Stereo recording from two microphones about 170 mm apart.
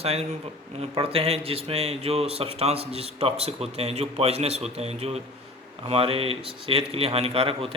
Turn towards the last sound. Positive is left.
turn(degrees=-35)  # may be behind; listen again after turning